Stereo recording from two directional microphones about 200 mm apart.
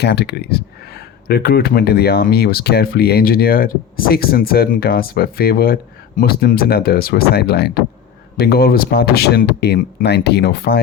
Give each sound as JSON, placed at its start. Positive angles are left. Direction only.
{"t": 0.0, "sound": "speech", "side_deg": 55}